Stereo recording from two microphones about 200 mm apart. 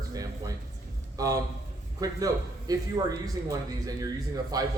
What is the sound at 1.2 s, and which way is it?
Speech, 20° right (ahead or behind).